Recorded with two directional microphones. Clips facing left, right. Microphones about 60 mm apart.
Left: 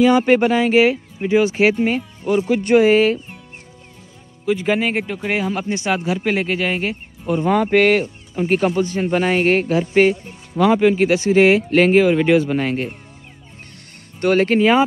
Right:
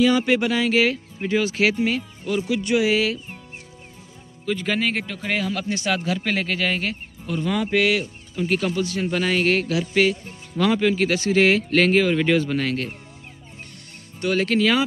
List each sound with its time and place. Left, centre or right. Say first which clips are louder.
0.0 s speech: left 5 dB; left
2.4 s speech: left 7 dB; left
4.5 s a man's voice: left 5 dB; centre
7.3 s speech: left 6 dB; left
10.6 s a man's voice: left 5 dB; left
14.2 s speech: left 5 dB; left